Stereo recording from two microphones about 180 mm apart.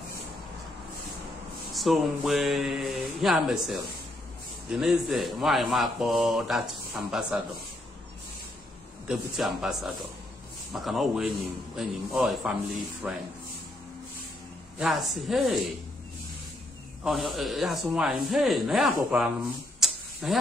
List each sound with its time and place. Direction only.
1.7 s speech: centre (ahead or behind)
9.0 s speech: 5° right (ahead or behind)
14.8 s speech: centre (ahead or behind)
17.0 s speech: centre (ahead or behind)
19.8 s a sound: centre (ahead or behind)